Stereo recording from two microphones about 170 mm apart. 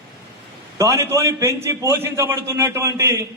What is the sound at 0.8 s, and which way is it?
A man's voice, 15° right (ahead or behind).